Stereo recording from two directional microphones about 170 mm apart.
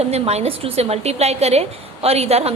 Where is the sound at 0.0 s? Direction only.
40° right (ahead or behind).